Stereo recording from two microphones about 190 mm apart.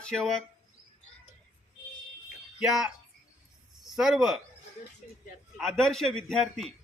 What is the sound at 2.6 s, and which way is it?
Speech, centre (ahead or behind).